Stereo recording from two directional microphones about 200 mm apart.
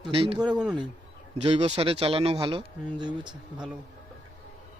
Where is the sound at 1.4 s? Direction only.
30° right (ahead or behind).